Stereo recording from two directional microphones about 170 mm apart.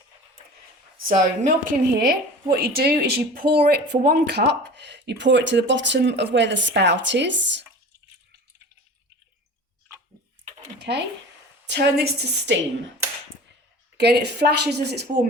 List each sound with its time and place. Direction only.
1.0 s a woman's voice: 50° right (ahead or behind); by 7.6 s 90° right
10.8 s a sound: 85° right
11.6 s a woman's voice: 80° right
13.9 s speech: 80° right